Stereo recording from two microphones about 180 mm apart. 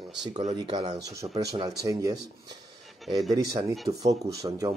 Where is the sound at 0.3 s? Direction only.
40° right (ahead or behind).